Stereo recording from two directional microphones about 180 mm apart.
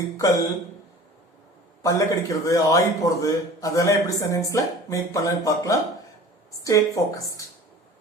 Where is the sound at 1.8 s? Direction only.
20° left (ahead or behind).